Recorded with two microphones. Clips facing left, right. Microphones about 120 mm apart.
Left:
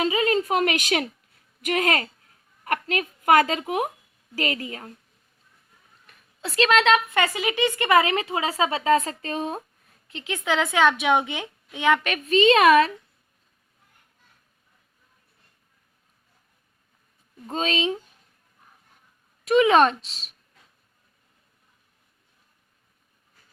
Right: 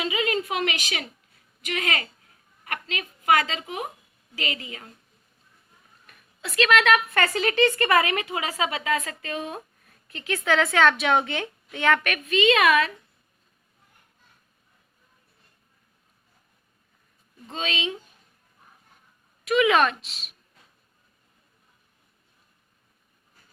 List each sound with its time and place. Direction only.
0.0 s a woman's voice: 35° left (ahead or behind)
6.1 s speech: 30° left (ahead or behind)
10.1 s a woman's voice: 20° left (ahead or behind)
12.1 s speech: 35° left (ahead or behind)
17.4 s speech: 40° left (ahead or behind)
19.5 s speech: 30° left (ahead or behind)